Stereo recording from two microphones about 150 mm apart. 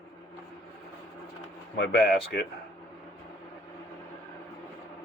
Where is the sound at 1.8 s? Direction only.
90° left.